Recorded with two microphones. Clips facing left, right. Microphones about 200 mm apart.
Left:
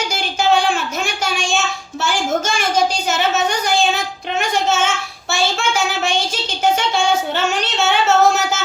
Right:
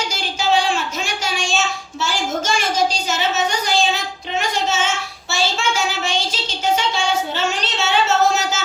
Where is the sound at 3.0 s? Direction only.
55° left (ahead or behind).